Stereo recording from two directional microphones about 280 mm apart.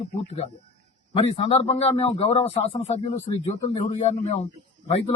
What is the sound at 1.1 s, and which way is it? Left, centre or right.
Speech, centre.